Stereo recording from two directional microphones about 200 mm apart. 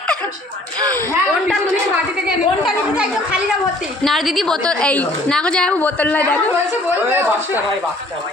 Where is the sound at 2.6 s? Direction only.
5° right (ahead or behind).